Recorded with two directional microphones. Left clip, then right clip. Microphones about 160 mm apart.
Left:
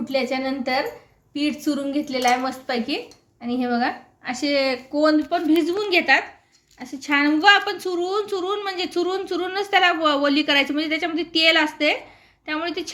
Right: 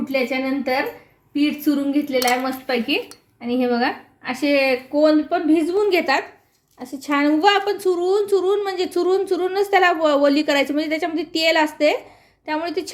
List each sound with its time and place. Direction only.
0.0 s a woman's voice: 25° right (ahead or behind)